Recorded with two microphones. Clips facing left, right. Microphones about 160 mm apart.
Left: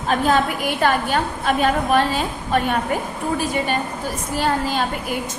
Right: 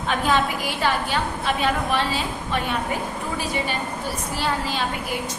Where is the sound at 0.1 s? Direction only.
45° left (ahead or behind).